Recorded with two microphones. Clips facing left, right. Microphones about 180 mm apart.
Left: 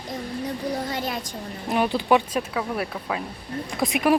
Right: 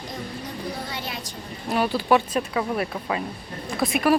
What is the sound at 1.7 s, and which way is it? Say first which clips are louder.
Speech: even; 20° left (ahead or behind).